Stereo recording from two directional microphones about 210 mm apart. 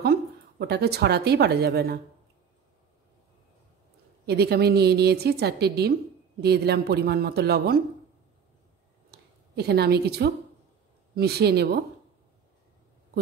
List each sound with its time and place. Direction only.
0.0 s a woman's voice: 50° right (ahead or behind)
4.3 s a woman's voice: 50° right (ahead or behind)
9.1 s a woman's voice: 50° right (ahead or behind)